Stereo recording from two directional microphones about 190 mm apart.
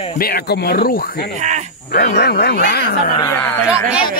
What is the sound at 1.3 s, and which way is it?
Speech, 40° right (ahead or behind).